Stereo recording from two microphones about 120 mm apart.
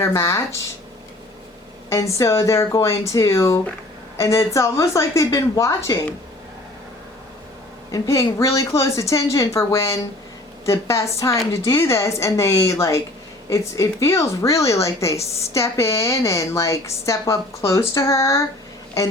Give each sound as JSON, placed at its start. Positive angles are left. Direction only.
{"t": 0.0, "sound": "a woman's voice", "side_deg": 25}
{"t": 1.9, "sound": "a woman's voice", "side_deg": 25}
{"t": 7.9, "sound": "a woman's voice", "side_deg": 25}